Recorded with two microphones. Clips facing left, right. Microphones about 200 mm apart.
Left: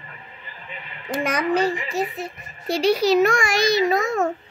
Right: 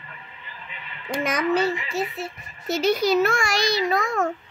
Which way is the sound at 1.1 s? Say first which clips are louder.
Left 1 dB; 10° left (ahead or behind).